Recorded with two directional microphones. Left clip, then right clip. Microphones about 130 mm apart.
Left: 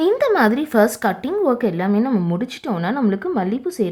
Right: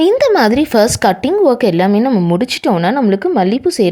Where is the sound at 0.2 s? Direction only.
40° right (ahead or behind).